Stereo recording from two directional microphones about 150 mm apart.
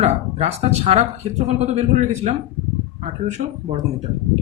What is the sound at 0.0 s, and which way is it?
Speech, 45° right (ahead or behind).